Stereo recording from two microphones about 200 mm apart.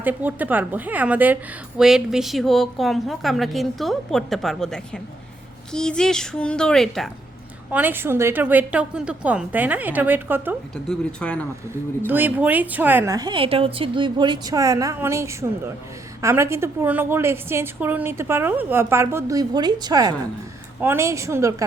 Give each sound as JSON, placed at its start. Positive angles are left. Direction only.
{"t": 0.0, "sound": "a woman's voice", "side_deg": -10}
{"t": 7.7, "sound": "a woman's voice", "side_deg": -10}
{"t": 10.8, "sound": "a woman's voice", "side_deg": 5}
{"t": 12.0, "sound": "a woman's voice", "side_deg": -10}